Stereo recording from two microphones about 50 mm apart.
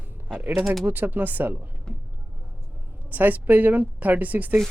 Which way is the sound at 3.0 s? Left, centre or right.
Right.